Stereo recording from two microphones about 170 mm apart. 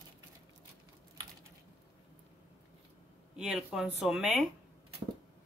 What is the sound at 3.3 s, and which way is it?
Speech, 5° right (ahead or behind).